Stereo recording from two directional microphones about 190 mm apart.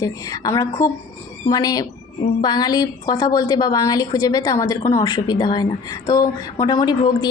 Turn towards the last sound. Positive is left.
turn(degrees=20)  # may be behind; listen again after turning